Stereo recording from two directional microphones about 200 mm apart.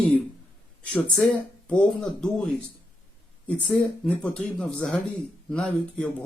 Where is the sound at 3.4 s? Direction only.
5° left (ahead or behind).